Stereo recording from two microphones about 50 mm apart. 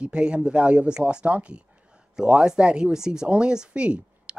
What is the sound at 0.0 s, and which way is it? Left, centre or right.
Speech, centre.